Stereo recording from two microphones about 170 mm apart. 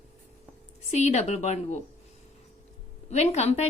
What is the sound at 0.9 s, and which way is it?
Speech, 40° left (ahead or behind).